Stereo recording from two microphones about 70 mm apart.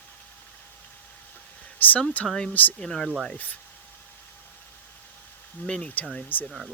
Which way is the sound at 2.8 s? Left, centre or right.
Centre.